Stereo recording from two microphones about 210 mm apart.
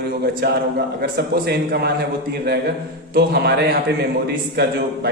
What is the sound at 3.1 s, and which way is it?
A man's voice, 50° right (ahead or behind).